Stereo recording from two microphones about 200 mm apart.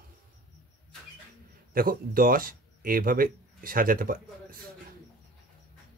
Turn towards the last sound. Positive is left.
turn(degrees=-45)  # may be behind; listen again after turning